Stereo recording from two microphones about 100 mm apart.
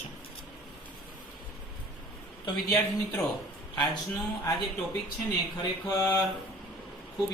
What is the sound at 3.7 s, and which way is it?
Speech, 45° left (ahead or behind).